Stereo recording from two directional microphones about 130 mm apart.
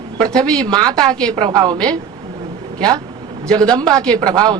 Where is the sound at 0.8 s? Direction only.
30° right (ahead or behind).